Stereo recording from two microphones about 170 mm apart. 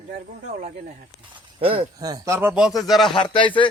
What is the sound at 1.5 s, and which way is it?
Speech, 30° right (ahead or behind).